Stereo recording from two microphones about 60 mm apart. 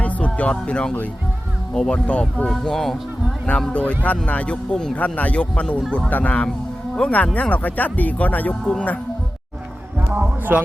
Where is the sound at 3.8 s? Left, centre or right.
Left.